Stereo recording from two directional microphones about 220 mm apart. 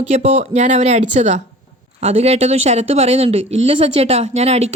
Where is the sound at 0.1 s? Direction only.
30° right (ahead or behind).